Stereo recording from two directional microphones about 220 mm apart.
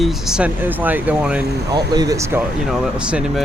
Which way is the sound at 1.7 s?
15° right (ahead or behind).